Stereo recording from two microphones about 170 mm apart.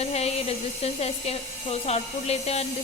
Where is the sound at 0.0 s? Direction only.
35° left (ahead or behind).